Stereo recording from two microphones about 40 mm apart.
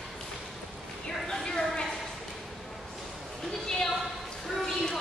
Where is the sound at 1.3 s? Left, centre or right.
Centre.